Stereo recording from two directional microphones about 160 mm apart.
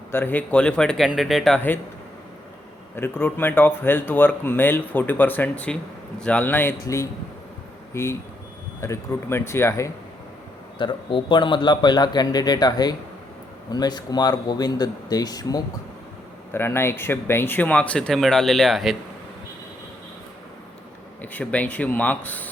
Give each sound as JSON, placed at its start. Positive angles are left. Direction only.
{"t": 0.1, "sound": "speech", "side_deg": 15}
{"t": 2.9, "sound": "speech", "side_deg": 10}
{"t": 10.8, "sound": "a man's voice", "side_deg": 30}
{"t": 21.2, "sound": "speech", "side_deg": 10}